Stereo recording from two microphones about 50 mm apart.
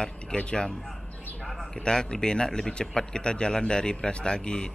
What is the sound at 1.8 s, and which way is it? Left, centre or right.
Speech, centre.